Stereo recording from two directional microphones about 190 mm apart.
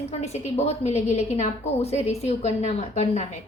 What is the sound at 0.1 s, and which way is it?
A woman's voice, 35° left (ahead or behind).